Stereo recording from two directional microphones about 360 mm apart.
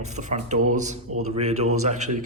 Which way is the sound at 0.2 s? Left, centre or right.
Centre.